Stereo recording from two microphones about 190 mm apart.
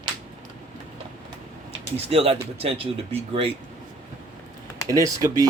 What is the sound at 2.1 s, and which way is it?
Speech, 30° right (ahead or behind).